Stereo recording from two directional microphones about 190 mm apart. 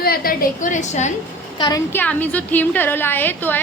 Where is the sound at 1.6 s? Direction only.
20° left (ahead or behind).